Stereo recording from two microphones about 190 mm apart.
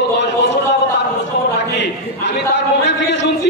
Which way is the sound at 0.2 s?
65° left (ahead or behind).